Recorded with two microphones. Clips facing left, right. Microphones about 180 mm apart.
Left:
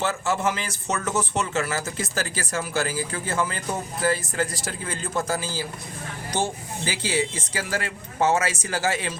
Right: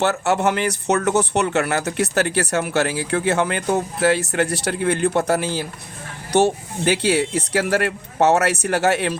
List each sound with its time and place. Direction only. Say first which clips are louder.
0.0 s speech: right 6 dB; 70° right (ahead or behind)